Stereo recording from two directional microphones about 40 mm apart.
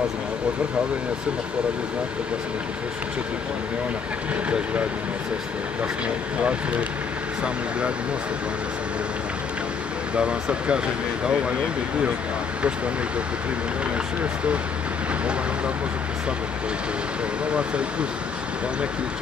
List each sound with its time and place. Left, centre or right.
6.0 s speech: right
10.1 s speech: right
17.5 s speech: right